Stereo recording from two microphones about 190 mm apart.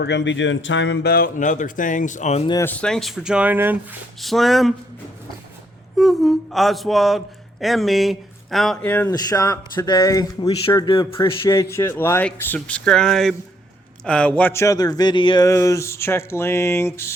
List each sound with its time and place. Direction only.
0.0 s speech: 70° left (ahead or behind); by 2.4 s 40° left (ahead or behind)
2.5 s speech: 15° left (ahead or behind)
6.0 s speech: centre (ahead or behind)